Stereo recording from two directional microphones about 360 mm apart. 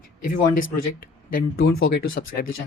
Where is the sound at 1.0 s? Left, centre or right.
Left.